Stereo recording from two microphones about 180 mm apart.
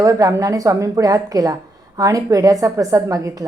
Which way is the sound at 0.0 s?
20° right (ahead or behind).